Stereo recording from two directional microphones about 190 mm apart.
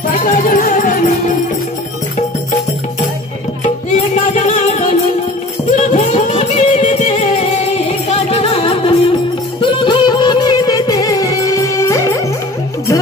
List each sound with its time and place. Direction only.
0.2 s music: 45° left (ahead or behind)
3.6 s music: 40° left (ahead or behind); by 12.3 s 15° left (ahead or behind)